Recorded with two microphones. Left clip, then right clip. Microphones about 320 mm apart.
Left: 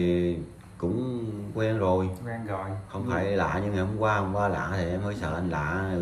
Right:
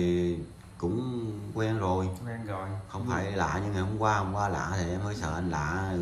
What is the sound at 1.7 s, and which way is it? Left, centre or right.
Speech, centre.